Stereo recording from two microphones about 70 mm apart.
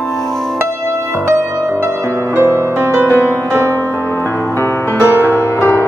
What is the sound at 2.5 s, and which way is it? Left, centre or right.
Music, right.